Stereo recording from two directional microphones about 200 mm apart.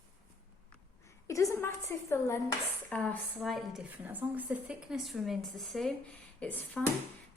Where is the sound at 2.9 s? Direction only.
5° left (ahead or behind).